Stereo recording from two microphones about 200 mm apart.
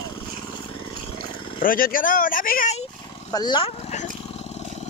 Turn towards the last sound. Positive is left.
turn(degrees=20)  # may be behind; listen again after turning